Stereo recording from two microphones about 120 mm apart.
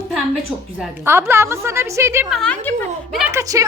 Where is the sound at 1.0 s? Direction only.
20° right (ahead or behind).